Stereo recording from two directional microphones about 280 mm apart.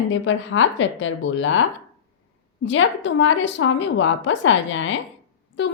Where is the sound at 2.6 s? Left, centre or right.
Left.